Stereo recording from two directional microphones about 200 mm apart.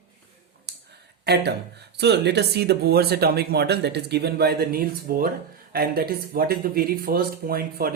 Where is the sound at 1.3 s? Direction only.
55° right (ahead or behind).